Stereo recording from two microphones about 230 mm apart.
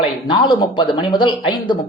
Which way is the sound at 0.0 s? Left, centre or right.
Left.